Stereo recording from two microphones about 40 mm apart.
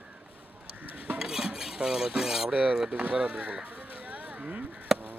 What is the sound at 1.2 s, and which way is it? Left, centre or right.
Cutlery, centre.